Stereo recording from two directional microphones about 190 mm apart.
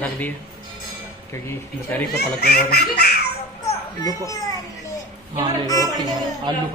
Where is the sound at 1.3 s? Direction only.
10° left (ahead or behind).